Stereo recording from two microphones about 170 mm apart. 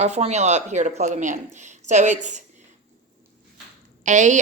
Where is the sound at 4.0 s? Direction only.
45° right (ahead or behind).